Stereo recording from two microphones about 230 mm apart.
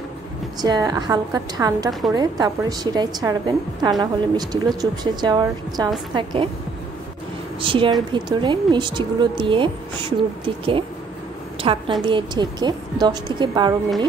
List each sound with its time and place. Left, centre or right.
0.6 s a woman's voice: centre
1.9 s a woman's voice: centre
2.1 s a woman's voice: centre
7.6 s speech: right